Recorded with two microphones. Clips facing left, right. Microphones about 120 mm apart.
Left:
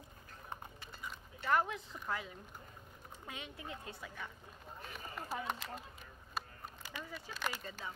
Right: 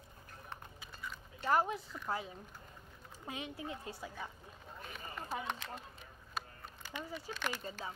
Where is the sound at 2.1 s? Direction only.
30° right (ahead or behind).